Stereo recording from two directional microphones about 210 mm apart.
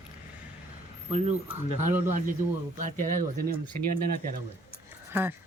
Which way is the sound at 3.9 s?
45° right (ahead or behind).